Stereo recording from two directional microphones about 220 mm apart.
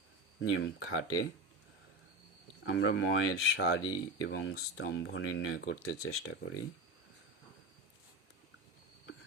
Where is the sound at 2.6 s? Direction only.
60° left (ahead or behind).